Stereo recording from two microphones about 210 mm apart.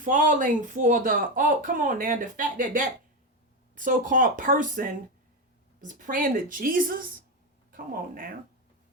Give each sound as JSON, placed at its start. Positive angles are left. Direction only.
{"t": 0.0, "sound": "speech", "side_deg": -35}